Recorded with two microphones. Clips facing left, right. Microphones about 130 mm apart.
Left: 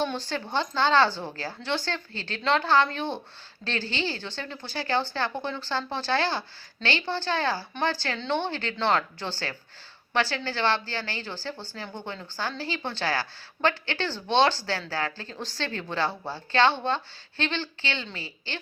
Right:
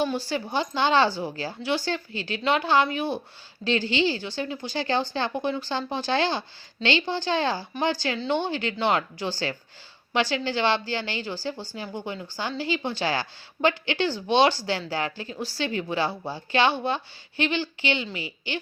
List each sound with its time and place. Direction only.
0.0 s speech: 10° right (ahead or behind)